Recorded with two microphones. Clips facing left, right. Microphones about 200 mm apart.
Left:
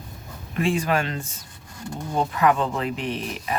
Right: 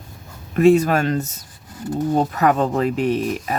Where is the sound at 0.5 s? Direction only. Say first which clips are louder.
Right 9 dB; 40° right (ahead or behind).